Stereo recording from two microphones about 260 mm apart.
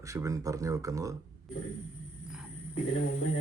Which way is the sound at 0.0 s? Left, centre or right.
Centre.